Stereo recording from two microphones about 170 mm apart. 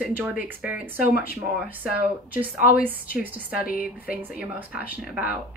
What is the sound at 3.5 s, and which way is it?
Speech, 60° left (ahead or behind).